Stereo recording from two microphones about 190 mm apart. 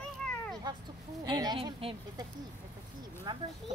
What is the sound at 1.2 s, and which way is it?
Speech, 25° right (ahead or behind).